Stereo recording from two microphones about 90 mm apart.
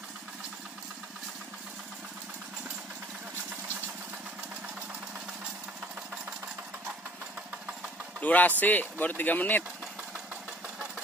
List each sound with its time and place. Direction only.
8.2 s speech: 15° left (ahead or behind)